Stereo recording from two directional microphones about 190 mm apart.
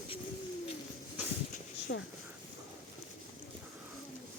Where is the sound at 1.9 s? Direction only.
70° left (ahead or behind).